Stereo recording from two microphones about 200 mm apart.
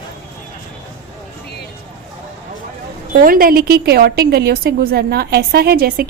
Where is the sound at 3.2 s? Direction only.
45° right (ahead or behind).